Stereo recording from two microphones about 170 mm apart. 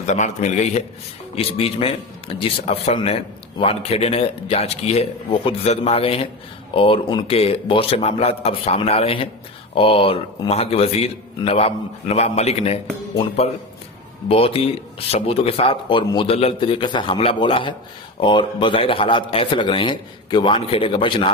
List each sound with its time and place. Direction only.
0.0 s a man's voice: 45° left (ahead or behind)
1.3 s a man's voice: 35° left (ahead or behind)